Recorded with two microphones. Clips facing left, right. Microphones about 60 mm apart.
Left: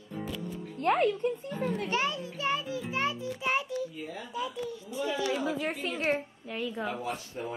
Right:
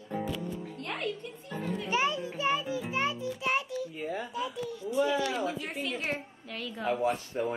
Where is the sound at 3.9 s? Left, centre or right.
Right.